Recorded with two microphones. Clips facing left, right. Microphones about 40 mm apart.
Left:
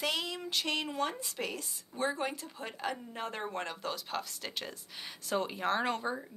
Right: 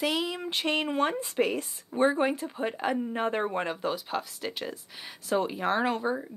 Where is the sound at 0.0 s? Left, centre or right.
Centre.